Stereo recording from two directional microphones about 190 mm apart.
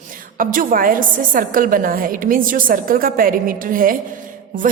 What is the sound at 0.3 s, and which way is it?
A woman's voice, 45° right (ahead or behind).